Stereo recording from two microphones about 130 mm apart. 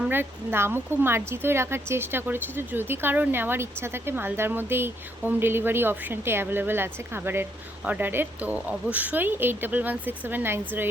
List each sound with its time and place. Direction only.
0.0 s speech: 15° right (ahead or behind)